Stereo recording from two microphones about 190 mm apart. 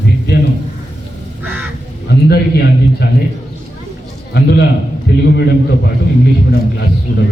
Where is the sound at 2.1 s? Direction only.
60° left (ahead or behind).